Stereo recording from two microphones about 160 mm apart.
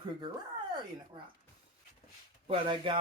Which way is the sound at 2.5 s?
30° right (ahead or behind).